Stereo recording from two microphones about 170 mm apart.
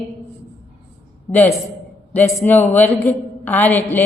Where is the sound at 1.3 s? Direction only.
10° left (ahead or behind).